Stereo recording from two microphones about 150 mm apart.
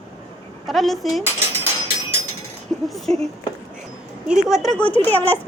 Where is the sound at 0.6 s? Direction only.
Centre (ahead or behind).